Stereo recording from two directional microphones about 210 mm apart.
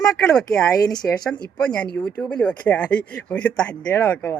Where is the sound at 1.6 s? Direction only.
5° left (ahead or behind).